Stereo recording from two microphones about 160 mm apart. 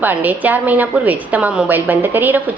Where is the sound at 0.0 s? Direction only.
10° right (ahead or behind).